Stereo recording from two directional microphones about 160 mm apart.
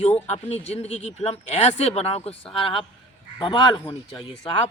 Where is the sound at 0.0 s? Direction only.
40° left (ahead or behind).